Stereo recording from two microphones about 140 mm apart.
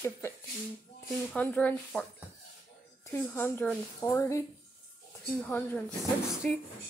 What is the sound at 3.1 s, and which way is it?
Speech, 15° left (ahead or behind).